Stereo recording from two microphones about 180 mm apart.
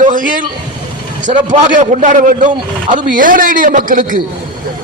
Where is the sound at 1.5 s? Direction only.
45° right (ahead or behind).